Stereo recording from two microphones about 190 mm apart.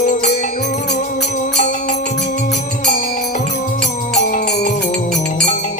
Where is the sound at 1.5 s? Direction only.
35° left (ahead or behind).